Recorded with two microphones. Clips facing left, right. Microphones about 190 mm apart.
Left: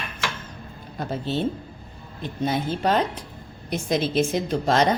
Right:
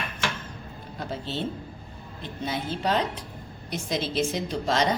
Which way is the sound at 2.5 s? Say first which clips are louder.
Left 4 dB; 50° left (ahead or behind).